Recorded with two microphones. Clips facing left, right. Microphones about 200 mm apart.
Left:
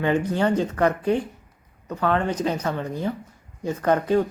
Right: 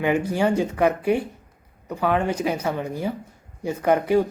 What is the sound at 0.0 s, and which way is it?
Speech, 10° right (ahead or behind).